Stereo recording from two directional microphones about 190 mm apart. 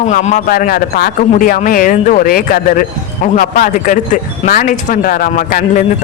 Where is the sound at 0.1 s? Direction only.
40° left (ahead or behind).